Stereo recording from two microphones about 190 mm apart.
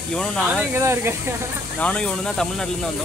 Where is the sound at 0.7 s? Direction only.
15° right (ahead or behind).